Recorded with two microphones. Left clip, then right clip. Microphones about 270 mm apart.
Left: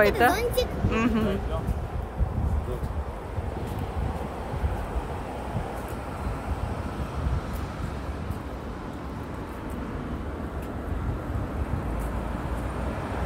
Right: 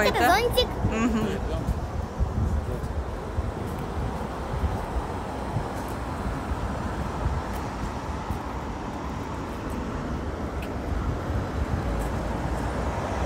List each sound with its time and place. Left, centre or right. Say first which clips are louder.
0.0 s speech: even; centre